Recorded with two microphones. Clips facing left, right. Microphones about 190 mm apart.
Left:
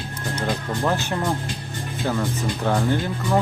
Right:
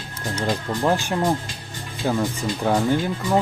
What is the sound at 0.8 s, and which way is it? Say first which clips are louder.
Speech: right 3 dB; 15° right (ahead or behind).